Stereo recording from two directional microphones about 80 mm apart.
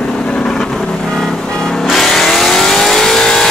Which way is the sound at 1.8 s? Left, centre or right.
Centre.